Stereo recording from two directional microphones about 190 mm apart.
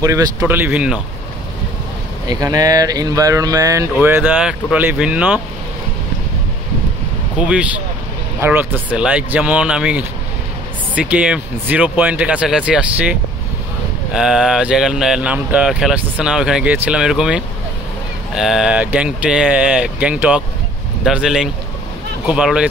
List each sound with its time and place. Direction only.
0.0 s speech: 15° right (ahead or behind)
2.2 s speech: 20° right (ahead or behind)
7.3 s speech: 5° right (ahead or behind)